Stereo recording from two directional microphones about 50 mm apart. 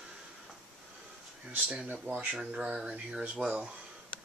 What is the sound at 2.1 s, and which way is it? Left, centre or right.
Speech, right.